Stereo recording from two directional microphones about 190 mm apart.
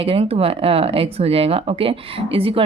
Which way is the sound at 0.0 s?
30° right (ahead or behind).